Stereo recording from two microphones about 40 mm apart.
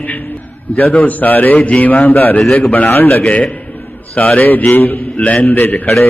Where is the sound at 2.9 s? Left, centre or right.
Left.